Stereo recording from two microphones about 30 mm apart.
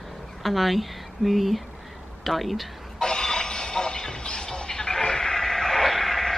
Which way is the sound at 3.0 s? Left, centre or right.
Left.